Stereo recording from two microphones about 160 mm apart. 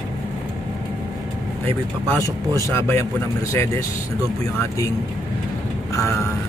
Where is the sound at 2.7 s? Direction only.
15° left (ahead or behind).